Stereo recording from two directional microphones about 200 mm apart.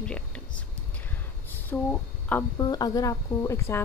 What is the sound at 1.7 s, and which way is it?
A woman's voice, 10° left (ahead or behind).